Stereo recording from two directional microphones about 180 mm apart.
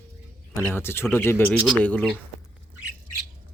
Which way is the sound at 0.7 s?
15° left (ahead or behind).